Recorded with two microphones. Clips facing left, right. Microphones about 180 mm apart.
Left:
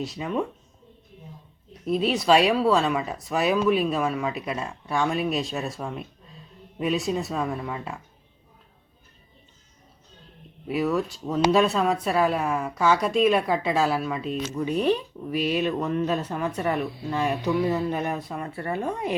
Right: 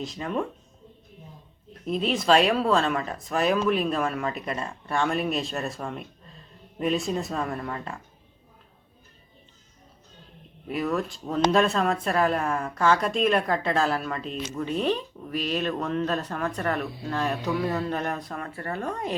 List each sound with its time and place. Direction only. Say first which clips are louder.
0.0 s speech: left 2 dB; 5° left (ahead or behind)
1.9 s speech: left 2 dB; 5° left (ahead or behind)
10.7 s speech: left 3 dB; 5° left (ahead or behind)